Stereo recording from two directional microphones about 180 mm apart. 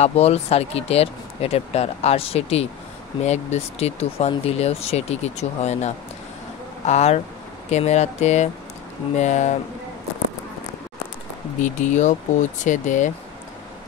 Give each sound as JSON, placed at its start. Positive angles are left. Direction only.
{"t": 0.0, "sound": "speech", "side_deg": 35}
{"t": 11.6, "sound": "speech", "side_deg": 45}